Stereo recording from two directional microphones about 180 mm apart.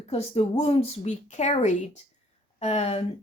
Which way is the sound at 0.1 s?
35° left (ahead or behind).